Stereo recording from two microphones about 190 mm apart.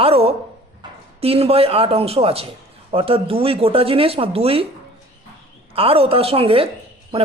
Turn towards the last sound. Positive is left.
turn(degrees=-30)  # may be behind; listen again after turning